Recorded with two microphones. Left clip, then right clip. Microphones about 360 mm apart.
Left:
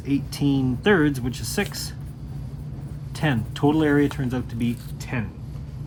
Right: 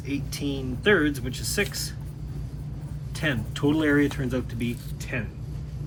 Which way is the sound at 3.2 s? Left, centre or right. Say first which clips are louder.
Left 3 dB; centre.